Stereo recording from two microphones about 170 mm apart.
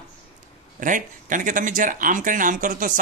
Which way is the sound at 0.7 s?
50° right (ahead or behind).